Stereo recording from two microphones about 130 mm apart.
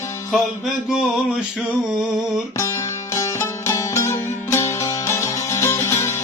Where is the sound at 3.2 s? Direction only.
25° left (ahead or behind).